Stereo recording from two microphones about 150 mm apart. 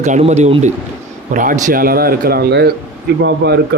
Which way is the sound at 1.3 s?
60° right (ahead or behind).